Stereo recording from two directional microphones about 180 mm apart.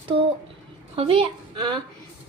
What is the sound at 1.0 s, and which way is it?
Speech, 30° right (ahead or behind).